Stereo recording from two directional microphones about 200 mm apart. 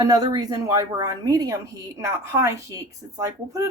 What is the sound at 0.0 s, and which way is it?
A woman's voice, 20° right (ahead or behind).